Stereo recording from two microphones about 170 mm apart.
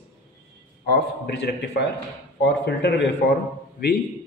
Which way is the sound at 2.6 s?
80° left.